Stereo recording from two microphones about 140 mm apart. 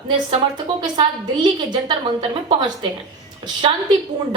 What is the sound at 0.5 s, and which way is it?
A woman's voice, 30° right (ahead or behind).